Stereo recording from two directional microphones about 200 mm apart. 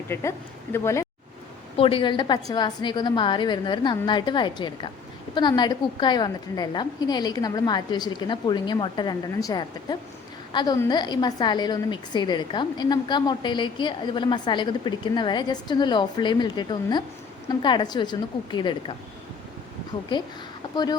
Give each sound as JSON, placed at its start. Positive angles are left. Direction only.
{"t": 0.1, "sound": "speech", "side_deg": 10}
{"t": 1.7, "sound": "a woman's voice", "side_deg": 25}